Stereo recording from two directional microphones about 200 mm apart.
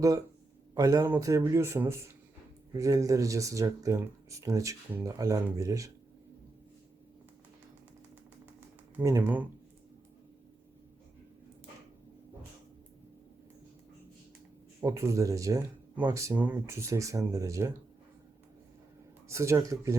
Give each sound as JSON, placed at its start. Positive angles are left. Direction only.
{"t": 0.7, "sound": "speech", "side_deg": -15}
{"t": 9.0, "sound": "speech", "side_deg": -10}
{"t": 14.8, "sound": "speech", "side_deg": -15}
{"t": 19.3, "sound": "speech", "side_deg": -15}